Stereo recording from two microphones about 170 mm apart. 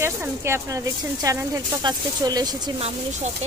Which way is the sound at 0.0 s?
15° right (ahead or behind).